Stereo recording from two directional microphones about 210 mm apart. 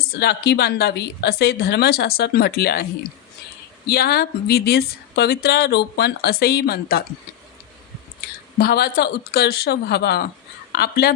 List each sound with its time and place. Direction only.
0.1 s speech: 50° left (ahead or behind)
3.8 s speech: 45° left (ahead or behind)
8.5 s a woman's voice: 45° left (ahead or behind)